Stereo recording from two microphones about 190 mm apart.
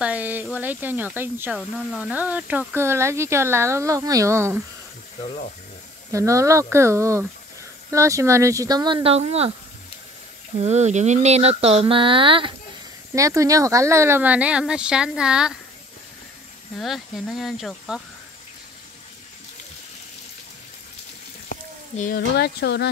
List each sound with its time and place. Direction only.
0.0 s a sound: 10° right (ahead or behind)
0.6 s speech: 10° right (ahead or behind)
6.1 s speech: 15° right (ahead or behind); by 9.5 s 35° right (ahead or behind)
10.6 s speech: 35° right (ahead or behind)
13.1 s speech: 15° right (ahead or behind)
16.7 s speech: centre (ahead or behind)
21.9 s speech: 45° left (ahead or behind)
22.3 s speech: 60° left (ahead or behind)